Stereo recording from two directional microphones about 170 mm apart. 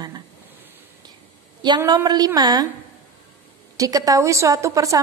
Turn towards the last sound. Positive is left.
turn(degrees=-20)  # may be behind; listen again after turning